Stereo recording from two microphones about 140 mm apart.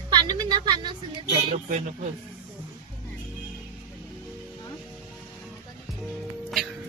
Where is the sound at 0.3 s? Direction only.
30° right (ahead or behind).